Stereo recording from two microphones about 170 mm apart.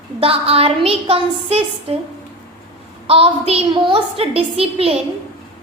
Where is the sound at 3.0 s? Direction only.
35° right (ahead or behind).